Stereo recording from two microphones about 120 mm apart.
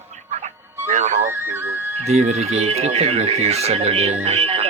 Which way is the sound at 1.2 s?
20° right (ahead or behind).